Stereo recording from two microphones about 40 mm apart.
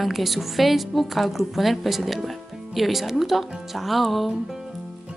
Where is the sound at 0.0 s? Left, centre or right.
Centre.